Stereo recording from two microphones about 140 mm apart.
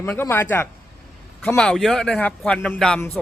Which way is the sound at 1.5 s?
Centre (ahead or behind).